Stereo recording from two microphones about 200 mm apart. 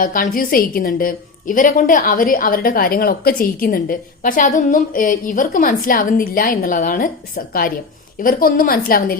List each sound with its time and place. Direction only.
0.0 s a woman's voice: 40° left (ahead or behind)